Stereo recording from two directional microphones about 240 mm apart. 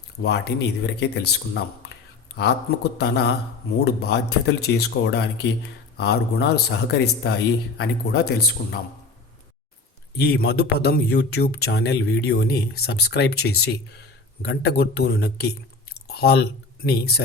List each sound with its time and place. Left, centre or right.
0.2 s a man's voice: left
10.2 s a man's voice: left